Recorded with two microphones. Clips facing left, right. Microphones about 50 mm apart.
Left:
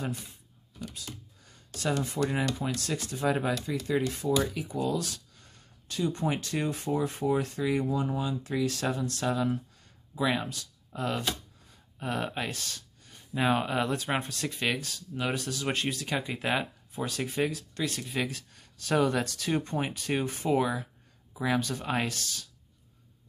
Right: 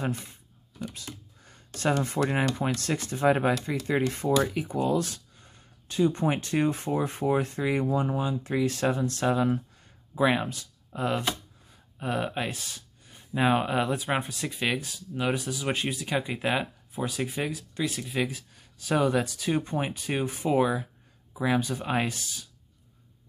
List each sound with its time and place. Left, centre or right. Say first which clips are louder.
0.0 s speech: right 4 dB; right
5.3 s speech: right 2 dB; right
12.0 s speech: right 3 dB; centre